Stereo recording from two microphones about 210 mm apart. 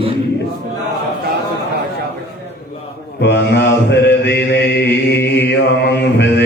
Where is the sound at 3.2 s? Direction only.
55° left (ahead or behind).